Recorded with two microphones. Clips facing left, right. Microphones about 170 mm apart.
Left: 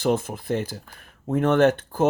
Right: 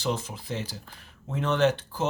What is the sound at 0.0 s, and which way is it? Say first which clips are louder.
Speech: left 7 dB; 55° left (ahead or behind).